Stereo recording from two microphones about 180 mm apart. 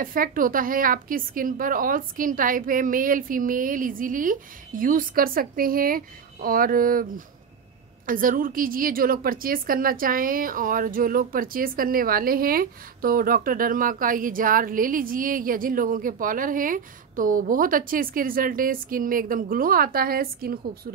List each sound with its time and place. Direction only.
0.0 s a woman's voice: 50° right (ahead or behind)
8.1 s a woman's voice: 50° right (ahead or behind)